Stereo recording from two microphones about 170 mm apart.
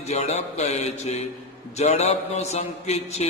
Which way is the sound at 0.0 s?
40° left (ahead or behind).